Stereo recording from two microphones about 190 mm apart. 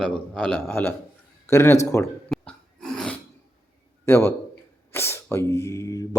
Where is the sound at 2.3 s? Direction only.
Centre (ahead or behind).